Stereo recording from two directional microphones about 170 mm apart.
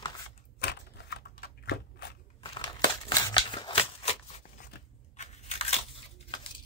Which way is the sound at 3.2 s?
25° left (ahead or behind).